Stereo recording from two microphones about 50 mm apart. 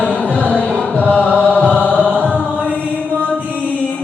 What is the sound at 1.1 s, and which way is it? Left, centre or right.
Chant, left.